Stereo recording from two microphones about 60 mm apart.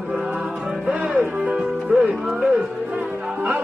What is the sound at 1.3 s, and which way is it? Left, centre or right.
Speech, centre.